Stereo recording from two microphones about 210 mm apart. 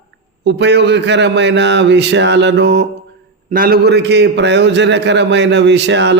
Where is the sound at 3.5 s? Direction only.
45° right (ahead or behind).